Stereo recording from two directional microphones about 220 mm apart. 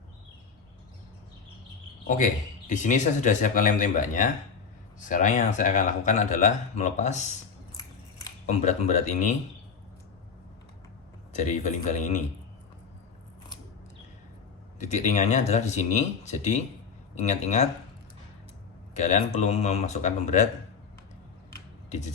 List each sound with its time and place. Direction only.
2.0 s speech: 35° left (ahead or behind)
8.4 s speech: 30° left (ahead or behind)
11.3 s speech: 35° left (ahead or behind)
14.8 s speech: 30° left (ahead or behind)
18.9 s speech: 30° left (ahead or behind)